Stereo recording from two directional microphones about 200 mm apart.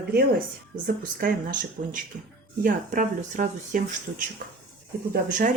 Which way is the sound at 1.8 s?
40° right (ahead or behind).